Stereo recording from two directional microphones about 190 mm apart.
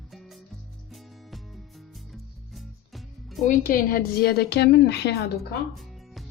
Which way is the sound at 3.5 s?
50° left (ahead or behind).